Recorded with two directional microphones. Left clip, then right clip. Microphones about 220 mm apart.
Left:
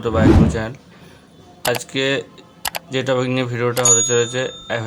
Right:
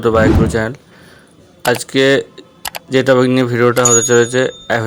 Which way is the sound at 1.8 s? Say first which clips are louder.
Right 8 dB; 30° right (ahead or behind).